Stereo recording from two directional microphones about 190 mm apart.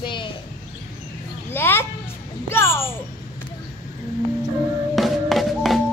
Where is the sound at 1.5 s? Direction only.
10° left (ahead or behind).